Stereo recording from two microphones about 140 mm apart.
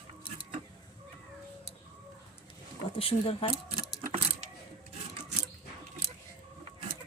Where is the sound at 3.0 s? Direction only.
40° left (ahead or behind).